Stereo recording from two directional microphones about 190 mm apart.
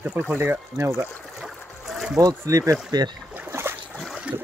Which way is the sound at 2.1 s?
15° right (ahead or behind).